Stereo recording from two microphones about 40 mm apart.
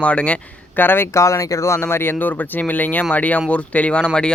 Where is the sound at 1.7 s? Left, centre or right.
Left.